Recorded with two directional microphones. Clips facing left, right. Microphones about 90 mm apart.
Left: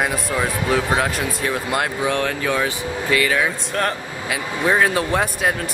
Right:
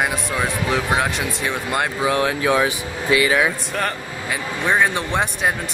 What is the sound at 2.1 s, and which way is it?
Speech, 10° right (ahead or behind).